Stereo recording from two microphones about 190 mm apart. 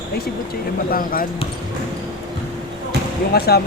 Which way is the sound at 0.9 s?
50° left (ahead or behind).